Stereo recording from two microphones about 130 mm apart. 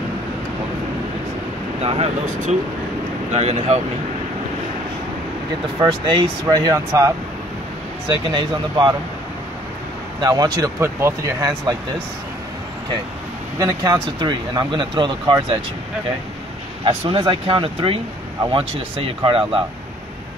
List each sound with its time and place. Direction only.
1.8 s speech: 50° right (ahead or behind)
5.8 s speech: 35° right (ahead or behind)
8.3 s speech: 35° right (ahead or behind)
10.2 s speech: 30° right (ahead or behind)
13.6 s speech: 25° right (ahead or behind)
17.1 s speech: 40° right (ahead or behind)